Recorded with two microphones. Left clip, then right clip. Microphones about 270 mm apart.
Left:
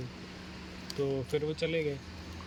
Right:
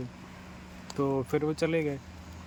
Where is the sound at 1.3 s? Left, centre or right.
Centre.